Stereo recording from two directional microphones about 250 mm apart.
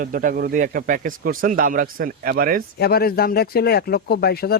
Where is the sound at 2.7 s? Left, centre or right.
Left.